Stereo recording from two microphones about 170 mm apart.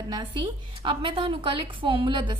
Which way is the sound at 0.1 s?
25° right (ahead or behind).